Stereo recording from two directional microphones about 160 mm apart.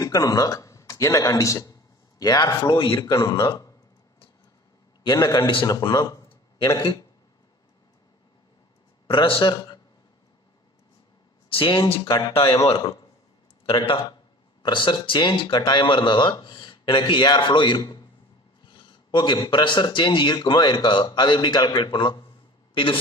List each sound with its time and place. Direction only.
0.0 s a man's voice: 25° left (ahead or behind)
3.1 s speech: 20° left (ahead or behind)
5.0 s speech: 25° left (ahead or behind)
9.0 s a man's voice: 35° left (ahead or behind)
11.4 s speech: 35° left (ahead or behind)
13.7 s speech: 35° left (ahead or behind)